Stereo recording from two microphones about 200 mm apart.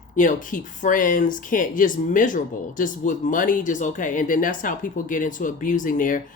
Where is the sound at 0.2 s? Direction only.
40° left (ahead or behind).